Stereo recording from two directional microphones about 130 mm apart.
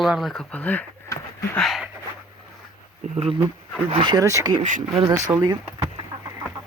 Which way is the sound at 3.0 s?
60° right (ahead or behind).